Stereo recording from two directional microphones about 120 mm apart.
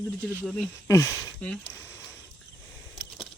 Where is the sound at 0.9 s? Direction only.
25° left (ahead or behind).